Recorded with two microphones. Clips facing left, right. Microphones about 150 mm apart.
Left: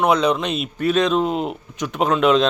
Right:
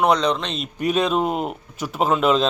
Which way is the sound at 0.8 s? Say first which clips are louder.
Left 2 dB; 10° right (ahead or behind).